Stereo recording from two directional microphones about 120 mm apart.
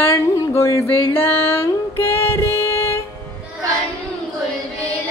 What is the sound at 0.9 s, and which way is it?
Music, 20° left (ahead or behind).